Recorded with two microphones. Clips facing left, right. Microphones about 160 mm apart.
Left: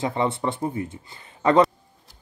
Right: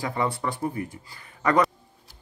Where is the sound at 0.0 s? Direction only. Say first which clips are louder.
Left 3 dB; 25° left (ahead or behind).